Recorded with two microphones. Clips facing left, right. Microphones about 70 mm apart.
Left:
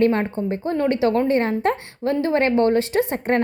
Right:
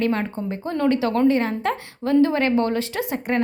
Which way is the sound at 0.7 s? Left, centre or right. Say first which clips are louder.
Left 1 dB; left.